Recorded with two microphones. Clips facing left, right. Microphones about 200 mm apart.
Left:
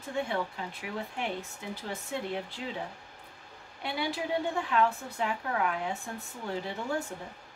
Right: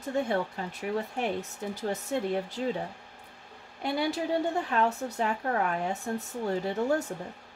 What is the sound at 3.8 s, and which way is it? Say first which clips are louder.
Speech: right 4 dB; 40° right (ahead or behind).